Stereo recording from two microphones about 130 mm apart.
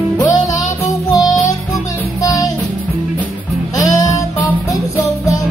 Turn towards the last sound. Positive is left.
turn(degrees=25)  # may be behind; listen again after turning